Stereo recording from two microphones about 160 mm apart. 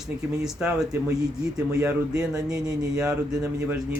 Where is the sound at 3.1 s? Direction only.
20° right (ahead or behind).